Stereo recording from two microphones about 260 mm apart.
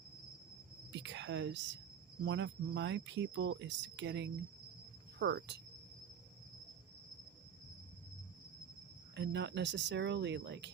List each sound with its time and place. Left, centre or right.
0.9 s speech: right
9.1 s speech: right